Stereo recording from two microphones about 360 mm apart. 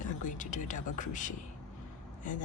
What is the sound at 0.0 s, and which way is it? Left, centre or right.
Speech, left.